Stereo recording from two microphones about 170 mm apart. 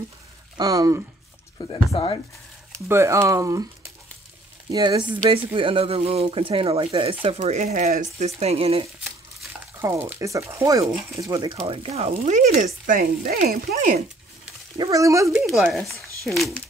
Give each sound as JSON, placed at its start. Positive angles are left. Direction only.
{"t": 0.6, "sound": "speech", "side_deg": -20}
{"t": 1.7, "sound": "speech", "side_deg": 30}
{"t": 2.9, "sound": "speech", "side_deg": -15}
{"t": 4.6, "sound": "speech", "side_deg": -25}
{"t": 9.8, "sound": "speech", "side_deg": -15}
{"t": 11.5, "sound": "speech", "side_deg": -35}
{"t": 14.8, "sound": "speech", "side_deg": -20}
{"t": 15.7, "sound": "speech", "side_deg": 0}